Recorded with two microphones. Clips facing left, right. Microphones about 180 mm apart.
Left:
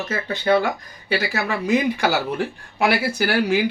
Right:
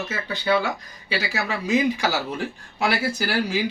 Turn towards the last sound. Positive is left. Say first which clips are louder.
# left 5 dB
turn(degrees=60)  # may be behind; listen again after turning